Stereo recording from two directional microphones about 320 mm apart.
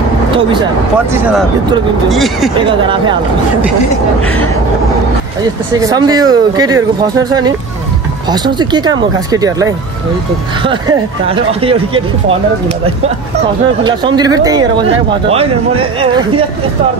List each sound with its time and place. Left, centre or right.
2.0 s speech: centre
5.8 s speech: centre